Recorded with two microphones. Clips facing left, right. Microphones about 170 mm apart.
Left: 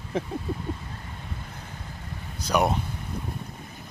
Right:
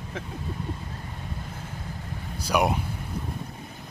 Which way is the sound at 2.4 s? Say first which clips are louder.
Even; 10° right (ahead or behind).